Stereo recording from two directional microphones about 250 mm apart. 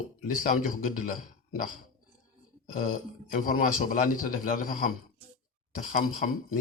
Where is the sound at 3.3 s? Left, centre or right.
Left.